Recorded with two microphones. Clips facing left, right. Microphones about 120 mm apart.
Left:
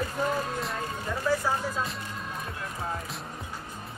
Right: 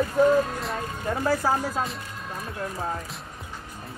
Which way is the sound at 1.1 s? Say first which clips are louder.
Right 4 dB; 45° right (ahead or behind).